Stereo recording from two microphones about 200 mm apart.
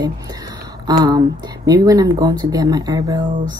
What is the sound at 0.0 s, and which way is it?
A woman's voice, 20° right (ahead or behind).